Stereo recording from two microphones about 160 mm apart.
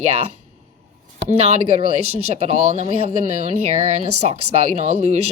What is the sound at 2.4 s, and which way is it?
A woman's voice, 45° right (ahead or behind).